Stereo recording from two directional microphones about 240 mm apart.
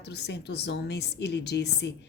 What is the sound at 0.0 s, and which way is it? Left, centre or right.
Speech, left.